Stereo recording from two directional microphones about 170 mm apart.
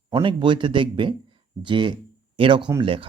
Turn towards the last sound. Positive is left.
turn(degrees=-30)  # may be behind; listen again after turning